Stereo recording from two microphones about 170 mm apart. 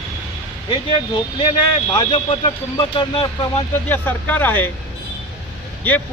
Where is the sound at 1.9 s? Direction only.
25° left (ahead or behind).